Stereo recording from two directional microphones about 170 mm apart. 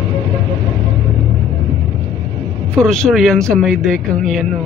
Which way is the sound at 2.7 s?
5° left (ahead or behind).